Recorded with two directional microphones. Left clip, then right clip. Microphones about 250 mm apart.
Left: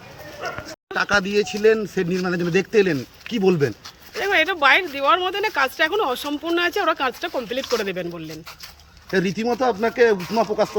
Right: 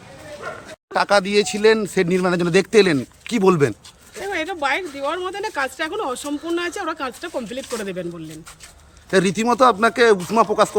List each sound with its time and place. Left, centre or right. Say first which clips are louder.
0.9 s speech: right 3 dB; centre
4.1 s speech: left 6 dB; centre
9.0 s speech: right 4 dB; centre